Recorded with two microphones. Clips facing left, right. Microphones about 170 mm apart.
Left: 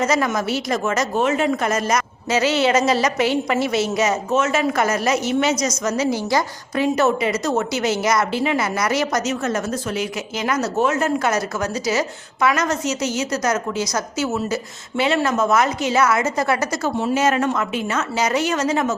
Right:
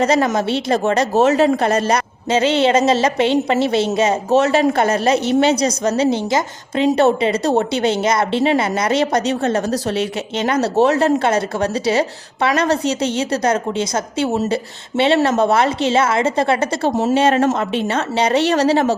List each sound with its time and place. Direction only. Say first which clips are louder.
0.0 s a woman's voice: right 4 dB; 30° right (ahead or behind)
16.9 s a woman's voice: right 4 dB; 40° right (ahead or behind)